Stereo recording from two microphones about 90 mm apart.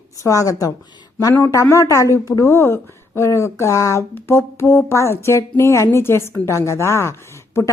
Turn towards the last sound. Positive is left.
turn(degrees=30)  # may be behind; listen again after turning